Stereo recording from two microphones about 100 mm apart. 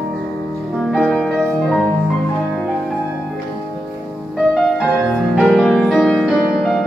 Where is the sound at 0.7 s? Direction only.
5° left (ahead or behind).